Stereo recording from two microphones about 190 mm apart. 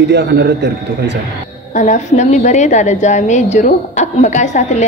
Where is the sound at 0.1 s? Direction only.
60° right (ahead or behind).